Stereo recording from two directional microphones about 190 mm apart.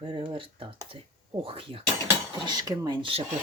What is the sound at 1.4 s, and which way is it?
Speech, 30° right (ahead or behind).